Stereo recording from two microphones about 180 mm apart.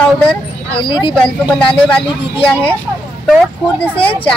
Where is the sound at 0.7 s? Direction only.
30° left (ahead or behind).